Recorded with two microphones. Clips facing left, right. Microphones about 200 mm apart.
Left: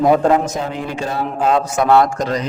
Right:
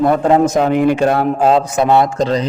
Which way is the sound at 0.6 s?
60° right (ahead or behind).